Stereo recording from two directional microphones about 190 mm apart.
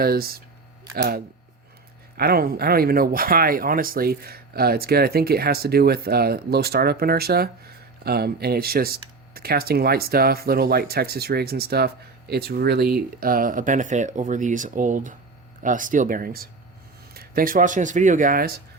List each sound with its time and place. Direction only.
0.0 s speech: 55° right (ahead or behind)
2.1 s speech: 55° right (ahead or behind)